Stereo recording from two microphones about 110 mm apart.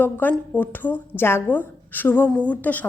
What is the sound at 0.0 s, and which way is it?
A woman's voice, 15° left (ahead or behind).